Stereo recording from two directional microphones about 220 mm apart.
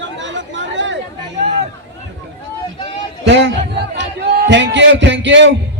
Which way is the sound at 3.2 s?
55° right (ahead or behind).